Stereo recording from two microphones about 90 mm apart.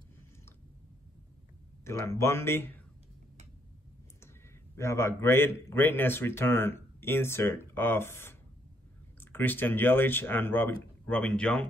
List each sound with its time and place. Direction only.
1.9 s a man's voice: 30° left (ahead or behind)
4.7 s a man's voice: 30° left (ahead or behind)
11.1 s speech: 10° left (ahead or behind)